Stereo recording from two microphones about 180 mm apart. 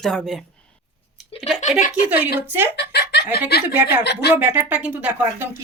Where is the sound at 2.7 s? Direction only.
65° left (ahead or behind).